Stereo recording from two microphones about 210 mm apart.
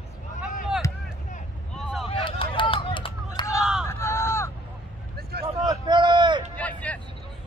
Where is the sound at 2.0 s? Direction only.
25° left (ahead or behind).